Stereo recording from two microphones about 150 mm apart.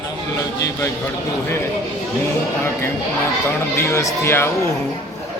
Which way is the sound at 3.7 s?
20° left (ahead or behind).